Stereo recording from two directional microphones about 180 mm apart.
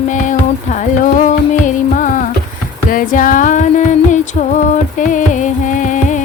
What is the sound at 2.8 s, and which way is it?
Music, 50° left (ahead or behind).